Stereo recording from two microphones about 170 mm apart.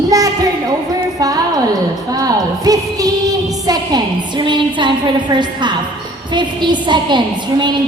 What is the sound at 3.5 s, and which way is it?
A woman's voice, 20° right (ahead or behind).